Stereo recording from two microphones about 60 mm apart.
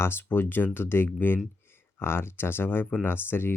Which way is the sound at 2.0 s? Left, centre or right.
Left.